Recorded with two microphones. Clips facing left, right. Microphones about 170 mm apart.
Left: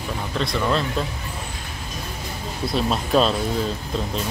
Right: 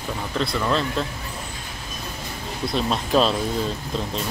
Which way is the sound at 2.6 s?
Centre (ahead or behind).